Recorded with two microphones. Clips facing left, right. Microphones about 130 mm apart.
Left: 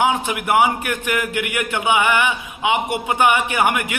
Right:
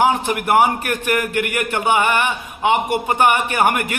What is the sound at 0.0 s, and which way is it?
A man's voice, 45° right (ahead or behind).